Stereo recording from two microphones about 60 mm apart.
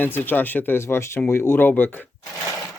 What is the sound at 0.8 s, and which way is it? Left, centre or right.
Speech, left.